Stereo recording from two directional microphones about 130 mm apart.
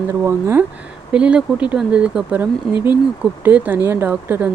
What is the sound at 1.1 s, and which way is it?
Speech, 10° right (ahead or behind).